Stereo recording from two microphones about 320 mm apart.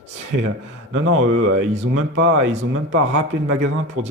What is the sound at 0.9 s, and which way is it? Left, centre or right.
A man's voice, right.